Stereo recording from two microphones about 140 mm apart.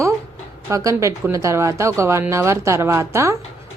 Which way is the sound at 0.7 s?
20° right (ahead or behind).